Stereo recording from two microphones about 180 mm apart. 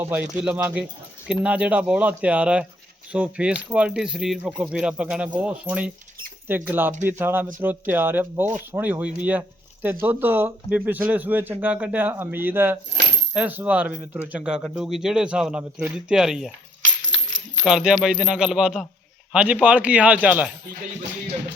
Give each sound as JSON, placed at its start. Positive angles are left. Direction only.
{"t": 0.0, "sound": "speech", "side_deg": -10}
{"t": 16.8, "sound": "coin", "side_deg": -90}
{"t": 17.6, "sound": "speech", "side_deg": -5}